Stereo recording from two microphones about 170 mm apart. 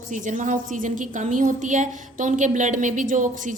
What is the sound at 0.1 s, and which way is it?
A woman's voice, 50° right (ahead or behind).